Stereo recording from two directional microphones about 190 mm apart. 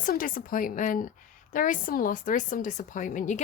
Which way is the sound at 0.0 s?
45° left (ahead or behind).